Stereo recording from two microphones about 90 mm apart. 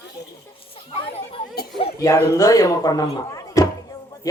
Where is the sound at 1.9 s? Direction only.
40° left (ahead or behind).